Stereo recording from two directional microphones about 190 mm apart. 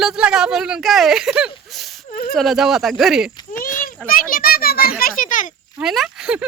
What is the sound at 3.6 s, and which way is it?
Children playing, 45° left (ahead or behind).